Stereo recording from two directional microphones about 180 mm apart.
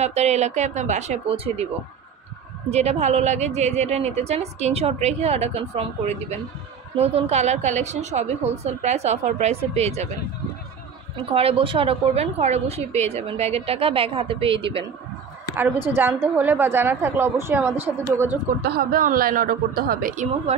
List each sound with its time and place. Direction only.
0.0 s a woman's voice: 35° right (ahead or behind)
2.7 s a woman's voice: 35° right (ahead or behind)
11.2 s a woman's voice: 30° right (ahead or behind)
15.5 s a woman's voice: 10° right (ahead or behind)
18.6 s a woman's voice: 55° right (ahead or behind)